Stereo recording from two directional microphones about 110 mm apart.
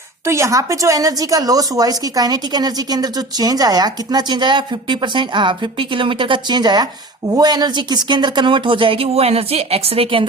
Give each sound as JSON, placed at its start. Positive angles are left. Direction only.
{"t": 0.3, "sound": "a woman's voice", "side_deg": -25}